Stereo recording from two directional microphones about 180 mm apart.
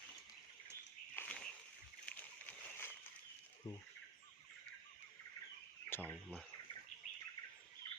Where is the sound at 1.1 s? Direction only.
5° left (ahead or behind).